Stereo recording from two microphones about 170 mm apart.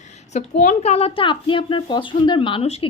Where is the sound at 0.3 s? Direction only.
45° left (ahead or behind).